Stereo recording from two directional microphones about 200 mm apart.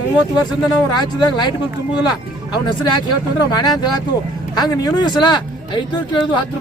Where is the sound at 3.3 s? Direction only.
20° left (ahead or behind).